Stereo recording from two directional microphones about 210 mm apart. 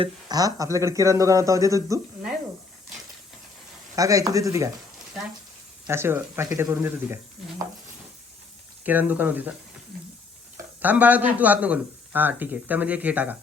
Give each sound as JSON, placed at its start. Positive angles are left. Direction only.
{"t": 0.0, "sound": "a man's voice", "side_deg": -20}
{"t": 3.9, "sound": "a man's voice", "side_deg": -15}
{"t": 5.9, "sound": "a man's voice", "side_deg": -10}
{"t": 8.8, "sound": "a man's voice", "side_deg": -10}
{"t": 10.8, "sound": "a man's voice", "side_deg": -10}